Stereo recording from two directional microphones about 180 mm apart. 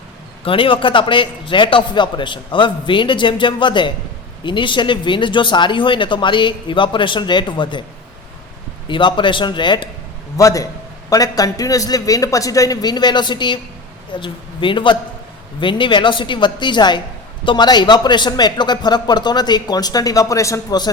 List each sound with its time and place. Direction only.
0.4 s a man's voice: 30° left (ahead or behind)
8.9 s a man's voice: 25° left (ahead or behind)